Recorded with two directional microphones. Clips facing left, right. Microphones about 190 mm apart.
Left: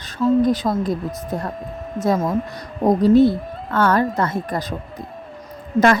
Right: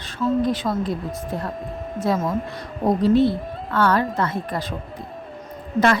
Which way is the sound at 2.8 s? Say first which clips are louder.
Left 4 dB; 40° left (ahead or behind).